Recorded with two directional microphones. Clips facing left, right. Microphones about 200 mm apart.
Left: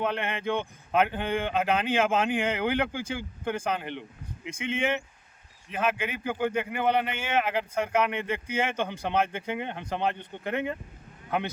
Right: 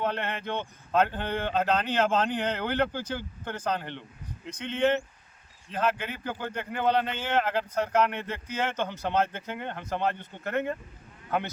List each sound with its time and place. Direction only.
0.1 s a man's voice: 15° left (ahead or behind)